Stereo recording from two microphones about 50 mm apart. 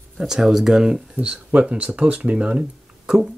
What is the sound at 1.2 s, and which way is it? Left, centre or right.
Speech, right.